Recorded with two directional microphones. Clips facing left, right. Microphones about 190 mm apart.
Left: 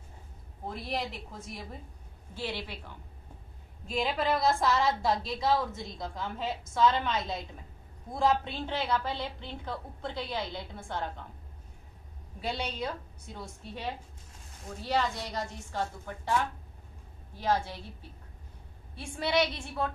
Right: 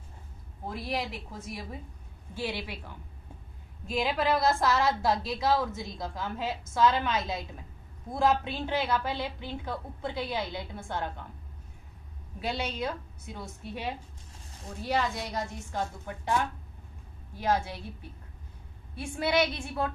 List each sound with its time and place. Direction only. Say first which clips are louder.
0.7 s a woman's voice: right 2 dB; centre (ahead or behind)
2.3 s a woman's voice: right 2 dB; 10° right (ahead or behind)
3.9 s a woman's voice: right 2 dB; 5° right (ahead or behind)
12.4 s a woman's voice: right 2 dB; 5° right (ahead or behind)
17.4 s a woman's voice: right 1 dB; 10° right (ahead or behind)
19.1 s a woman's voice: right 1 dB; 5° right (ahead or behind)